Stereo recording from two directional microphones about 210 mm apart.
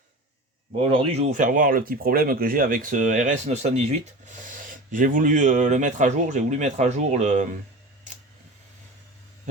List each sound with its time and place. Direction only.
0.8 s speech: 30° right (ahead or behind)